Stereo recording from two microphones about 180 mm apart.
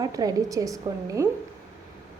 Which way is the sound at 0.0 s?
20° right (ahead or behind).